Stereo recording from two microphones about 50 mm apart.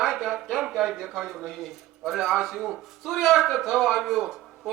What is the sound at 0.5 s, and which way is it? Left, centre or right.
Speech, centre.